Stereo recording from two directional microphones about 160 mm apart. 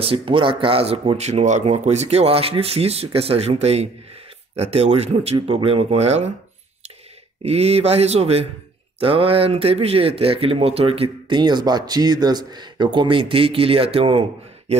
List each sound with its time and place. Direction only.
0.0 s speech: 35° right (ahead or behind)
7.4 s speech: 40° right (ahead or behind)